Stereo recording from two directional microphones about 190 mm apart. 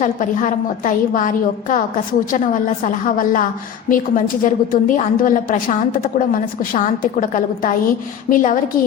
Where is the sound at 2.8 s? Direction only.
45° left (ahead or behind).